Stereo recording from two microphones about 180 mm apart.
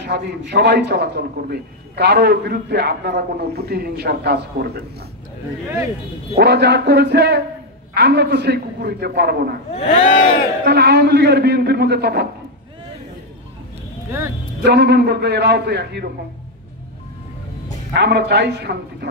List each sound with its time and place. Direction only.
0.1 s a man's voice: 60° right (ahead or behind)
6.3 s a man's voice: 65° right (ahead or behind)
9.7 s speech: 35° left (ahead or behind)
10.6 s a man's voice: 65° right (ahead or behind)
14.6 s a man's voice: 65° right (ahead or behind)
17.9 s a man's voice: 70° right (ahead or behind)